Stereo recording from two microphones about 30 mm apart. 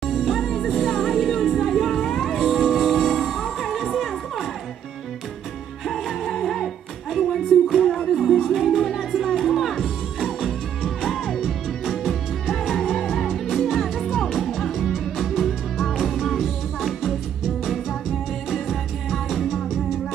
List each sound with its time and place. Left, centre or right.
0.0 s music: centre
5.9 s music: centre
11.1 s music: centre
11.8 s music: centre
12.1 s music: centre
16.3 s music: centre
18.5 s music: centre